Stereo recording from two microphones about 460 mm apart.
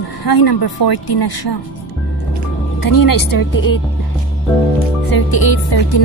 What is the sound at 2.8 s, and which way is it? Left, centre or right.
Speech, left.